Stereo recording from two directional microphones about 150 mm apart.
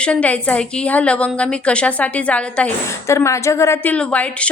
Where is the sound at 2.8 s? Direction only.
20° left (ahead or behind).